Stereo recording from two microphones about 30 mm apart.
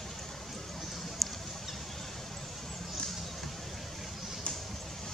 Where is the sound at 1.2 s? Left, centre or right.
Centre.